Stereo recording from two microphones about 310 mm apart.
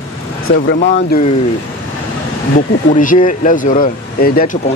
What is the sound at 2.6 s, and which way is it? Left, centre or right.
Speech, left.